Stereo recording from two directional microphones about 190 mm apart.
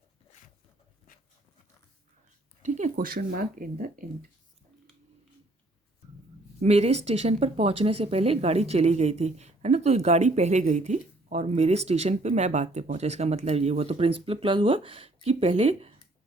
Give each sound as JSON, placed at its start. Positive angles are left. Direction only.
{"t": 2.6, "sound": "speech", "side_deg": -40}
{"t": 2.9, "sound": "speech", "side_deg": -50}
{"t": 6.6, "sound": "speech", "side_deg": -35}